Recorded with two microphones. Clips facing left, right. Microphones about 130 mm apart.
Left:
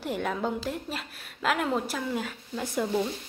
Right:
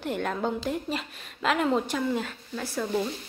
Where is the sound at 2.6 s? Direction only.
20° left (ahead or behind).